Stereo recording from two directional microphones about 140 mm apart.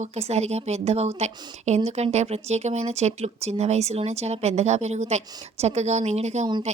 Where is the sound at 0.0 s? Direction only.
50° right (ahead or behind).